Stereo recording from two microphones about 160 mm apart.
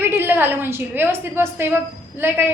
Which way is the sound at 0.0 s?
15° right (ahead or behind).